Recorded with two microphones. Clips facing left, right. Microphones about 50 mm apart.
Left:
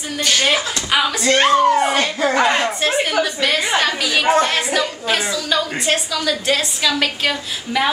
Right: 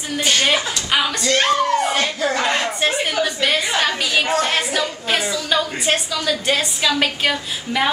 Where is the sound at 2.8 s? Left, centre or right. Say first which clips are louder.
Left 2 dB; centre.